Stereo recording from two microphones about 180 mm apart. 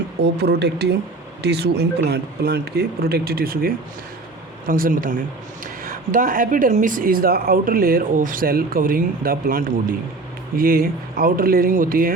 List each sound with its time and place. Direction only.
0.2 s speech: 65° right (ahead or behind)